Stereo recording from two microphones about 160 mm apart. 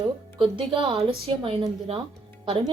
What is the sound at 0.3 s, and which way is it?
A woman's voice, 35° right (ahead or behind).